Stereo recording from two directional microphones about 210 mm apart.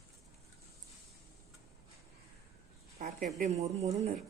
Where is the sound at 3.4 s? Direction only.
30° right (ahead or behind).